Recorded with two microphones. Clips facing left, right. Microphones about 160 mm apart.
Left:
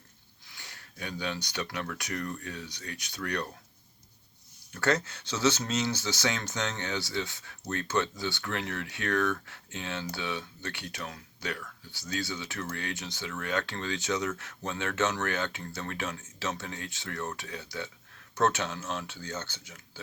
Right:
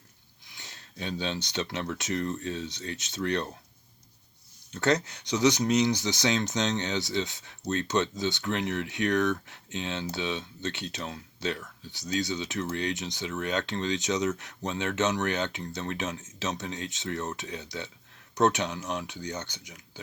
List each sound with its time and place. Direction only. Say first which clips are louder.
0.4 s speech: right 1 dB; 20° right (ahead or behind)
4.7 s speech: right 2 dB; 20° right (ahead or behind)